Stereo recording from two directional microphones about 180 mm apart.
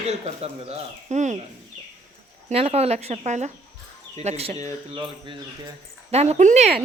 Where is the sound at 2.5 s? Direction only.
35° right (ahead or behind).